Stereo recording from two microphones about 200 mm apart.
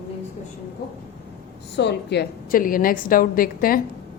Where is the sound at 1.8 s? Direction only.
60° left (ahead or behind).